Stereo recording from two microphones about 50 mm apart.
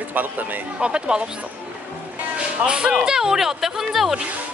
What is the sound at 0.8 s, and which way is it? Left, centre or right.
Speech, centre.